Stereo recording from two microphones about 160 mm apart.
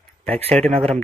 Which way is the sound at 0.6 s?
5° left (ahead or behind).